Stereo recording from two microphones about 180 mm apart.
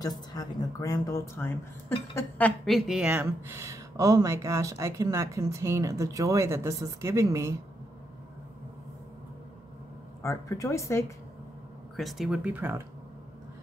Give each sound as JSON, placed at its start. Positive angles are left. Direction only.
{"t": 0.0, "sound": "speech", "side_deg": 20}
{"t": 10.2, "sound": "speech", "side_deg": 15}
{"t": 12.0, "sound": "speech", "side_deg": 0}